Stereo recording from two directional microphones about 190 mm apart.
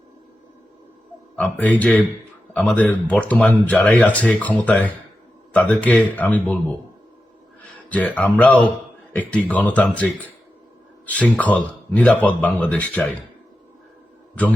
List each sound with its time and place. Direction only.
1.4 s a man's voice: 5° left (ahead or behind)
7.9 s speech: 5° left (ahead or behind)